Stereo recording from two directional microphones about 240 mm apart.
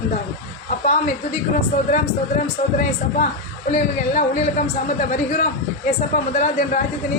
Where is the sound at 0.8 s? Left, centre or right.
Left.